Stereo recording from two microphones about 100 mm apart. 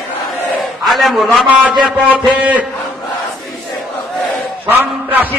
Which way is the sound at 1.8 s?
15° right (ahead or behind).